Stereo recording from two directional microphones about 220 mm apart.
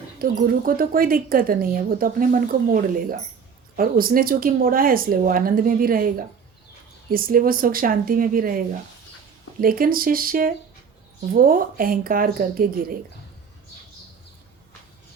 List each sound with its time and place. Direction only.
0.2 s speech: 40° right (ahead or behind)